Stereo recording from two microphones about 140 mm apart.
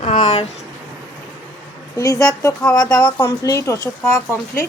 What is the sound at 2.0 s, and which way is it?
Speech, 25° left (ahead or behind).